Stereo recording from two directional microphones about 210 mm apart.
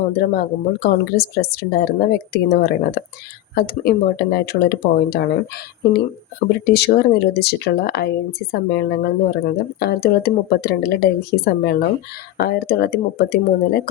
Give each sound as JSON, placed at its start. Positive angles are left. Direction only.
{"t": 0.2, "sound": "speech", "side_deg": 50}
{"t": 6.5, "sound": "speech", "side_deg": 50}